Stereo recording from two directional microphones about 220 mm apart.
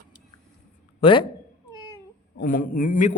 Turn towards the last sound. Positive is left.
turn(degrees=35)  # may be behind; listen again after turning